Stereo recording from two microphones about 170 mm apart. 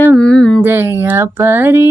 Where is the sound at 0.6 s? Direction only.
10° right (ahead or behind).